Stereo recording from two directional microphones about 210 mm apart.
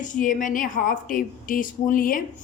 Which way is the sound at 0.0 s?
40° left (ahead or behind).